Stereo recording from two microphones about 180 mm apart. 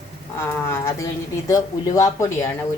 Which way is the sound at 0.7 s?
15° left (ahead or behind).